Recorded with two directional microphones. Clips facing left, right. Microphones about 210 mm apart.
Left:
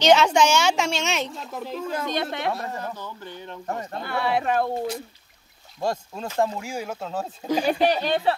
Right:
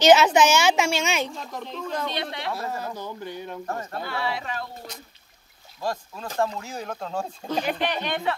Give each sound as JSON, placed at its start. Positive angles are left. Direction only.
{"t": 0.0, "sound": "a woman's voice", "side_deg": -5}
{"t": 2.0, "sound": "speech", "side_deg": 50}
{"t": 2.9, "sound": "speech", "side_deg": -10}
{"t": 3.6, "sound": "speech", "side_deg": 20}
{"t": 4.0, "sound": "speech", "side_deg": 55}
{"t": 5.8, "sound": "speech", "side_deg": 25}
{"t": 6.6, "sound": "speech", "side_deg": 10}
{"t": 7.8, "sound": "speech", "side_deg": 35}